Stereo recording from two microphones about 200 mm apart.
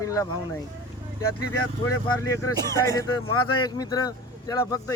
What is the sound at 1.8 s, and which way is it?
Speech, 15° left (ahead or behind).